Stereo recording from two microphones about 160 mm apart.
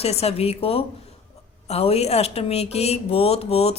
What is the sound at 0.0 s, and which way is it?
Speech, 40° left (ahead or behind).